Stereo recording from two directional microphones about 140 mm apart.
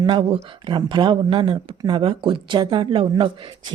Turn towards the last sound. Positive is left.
turn(degrees=-35)  # may be behind; listen again after turning